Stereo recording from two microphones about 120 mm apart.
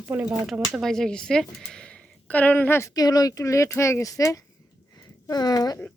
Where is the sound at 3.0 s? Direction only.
35° left (ahead or behind).